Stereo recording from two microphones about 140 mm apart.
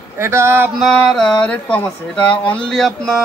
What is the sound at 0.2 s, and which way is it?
Speech, 20° right (ahead or behind).